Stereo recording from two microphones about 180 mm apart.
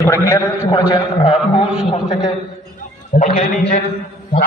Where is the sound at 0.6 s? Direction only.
30° left (ahead or behind).